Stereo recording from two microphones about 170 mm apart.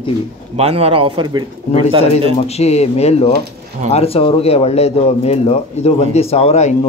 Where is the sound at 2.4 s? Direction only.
40° left (ahead or behind).